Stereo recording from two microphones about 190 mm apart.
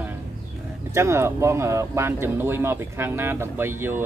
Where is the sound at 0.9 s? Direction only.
15° right (ahead or behind).